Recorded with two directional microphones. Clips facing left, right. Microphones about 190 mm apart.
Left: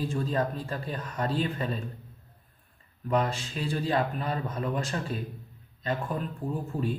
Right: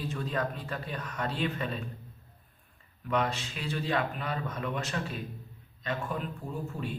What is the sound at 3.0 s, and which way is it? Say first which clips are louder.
A man's voice: left 3 dB; 35° left (ahead or behind).